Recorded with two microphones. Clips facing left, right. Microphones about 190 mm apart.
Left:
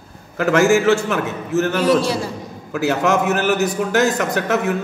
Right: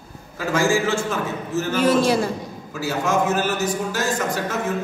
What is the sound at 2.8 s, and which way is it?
A man's voice, 70° left (ahead or behind).